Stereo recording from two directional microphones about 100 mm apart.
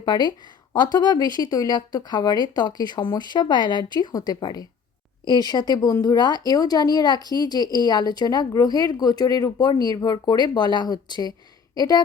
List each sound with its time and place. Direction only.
0.0 s speech: 45° left (ahead or behind)